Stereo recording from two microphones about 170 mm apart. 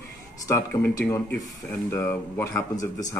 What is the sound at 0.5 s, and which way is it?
Speech, 20° left (ahead or behind).